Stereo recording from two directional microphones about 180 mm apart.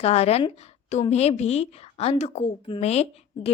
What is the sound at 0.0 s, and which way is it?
A woman's voice, 35° left (ahead or behind).